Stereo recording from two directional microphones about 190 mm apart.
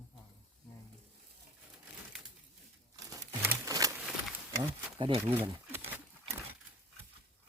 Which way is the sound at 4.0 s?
Centre (ahead or behind).